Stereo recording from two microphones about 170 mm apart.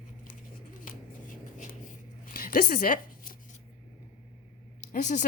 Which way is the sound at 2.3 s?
60° left (ahead or behind).